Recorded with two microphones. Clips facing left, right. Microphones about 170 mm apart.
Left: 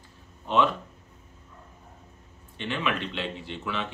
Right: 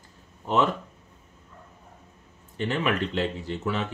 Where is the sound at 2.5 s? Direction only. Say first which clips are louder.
Right 4 dB; 40° right (ahead or behind).